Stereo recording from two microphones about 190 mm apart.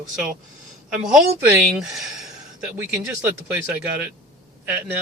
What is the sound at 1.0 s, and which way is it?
Speech, 10° right (ahead or behind).